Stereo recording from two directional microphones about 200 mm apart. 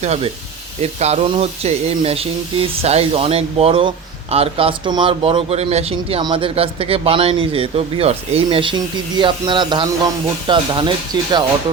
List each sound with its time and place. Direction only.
0.0 s speech: 30° right (ahead or behind)